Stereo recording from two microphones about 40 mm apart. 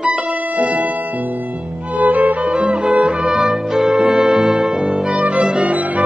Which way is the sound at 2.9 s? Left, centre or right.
Right.